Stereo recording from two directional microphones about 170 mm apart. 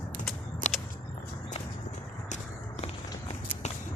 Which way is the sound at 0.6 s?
45° left (ahead or behind).